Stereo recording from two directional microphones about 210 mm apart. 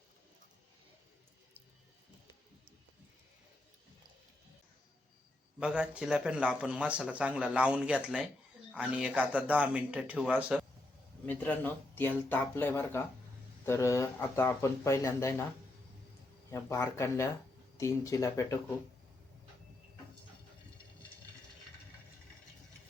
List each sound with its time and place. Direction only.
5.5 s speech: 5° right (ahead or behind)
11.3 s speech: 5° left (ahead or behind)
16.5 s speech: 15° left (ahead or behind)